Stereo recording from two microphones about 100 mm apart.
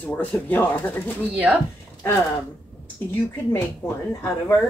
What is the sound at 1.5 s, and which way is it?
Speech, 15° right (ahead or behind).